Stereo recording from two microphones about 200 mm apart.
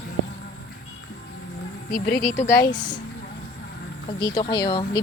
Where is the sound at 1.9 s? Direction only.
45° left (ahead or behind).